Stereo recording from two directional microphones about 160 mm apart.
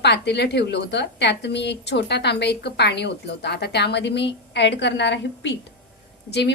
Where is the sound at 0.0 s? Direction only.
90° left.